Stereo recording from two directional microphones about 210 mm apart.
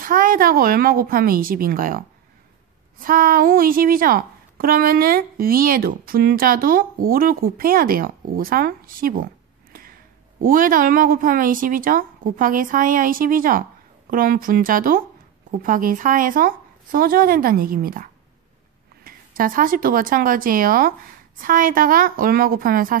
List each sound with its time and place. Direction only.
0.0 s a woman's voice: 40° right (ahead or behind)